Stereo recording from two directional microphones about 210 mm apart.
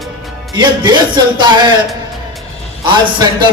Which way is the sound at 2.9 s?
20° right (ahead or behind).